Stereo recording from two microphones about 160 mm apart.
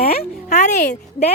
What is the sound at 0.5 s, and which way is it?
Speech, 50° left (ahead or behind).